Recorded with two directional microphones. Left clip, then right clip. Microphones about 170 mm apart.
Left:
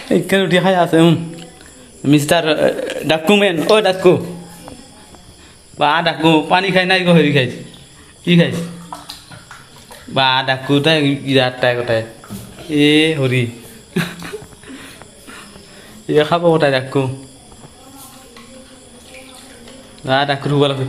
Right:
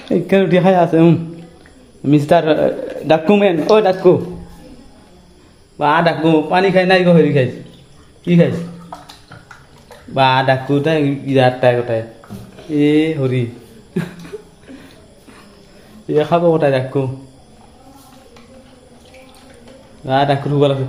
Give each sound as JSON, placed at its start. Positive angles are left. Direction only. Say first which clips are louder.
{"t": 0.1, "sound": "a man's voice", "louder": "right 1 dB", "side_deg": -15}
{"t": 5.8, "sound": "a man's voice", "louder": "even", "side_deg": -5}
{"t": 10.2, "sound": "a man's voice", "louder": "right 2 dB", "side_deg": -10}
{"t": 13.9, "sound": "a sound", "louder": "left 4 dB", "side_deg": -10}
{"t": 16.0, "sound": "a man's voice", "louder": "even", "side_deg": -5}
{"t": 20.1, "sound": "a man's voice", "louder": "right 1 dB", "side_deg": -10}